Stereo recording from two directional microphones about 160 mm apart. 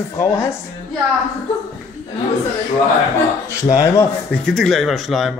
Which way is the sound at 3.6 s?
20° left (ahead or behind).